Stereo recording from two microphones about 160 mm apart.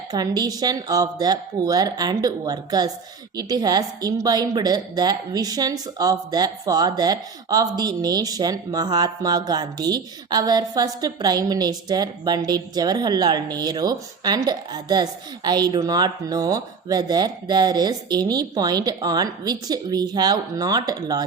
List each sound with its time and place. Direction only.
0.1 s a woman's voice: 25° right (ahead or behind)